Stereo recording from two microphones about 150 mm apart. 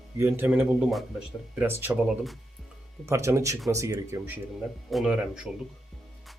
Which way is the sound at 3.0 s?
20° right (ahead or behind).